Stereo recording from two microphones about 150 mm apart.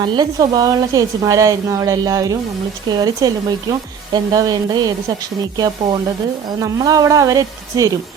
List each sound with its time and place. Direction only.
0.0 s a woman's voice: 30° right (ahead or behind)